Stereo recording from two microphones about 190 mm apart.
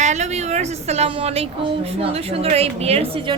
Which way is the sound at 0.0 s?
40° right (ahead or behind).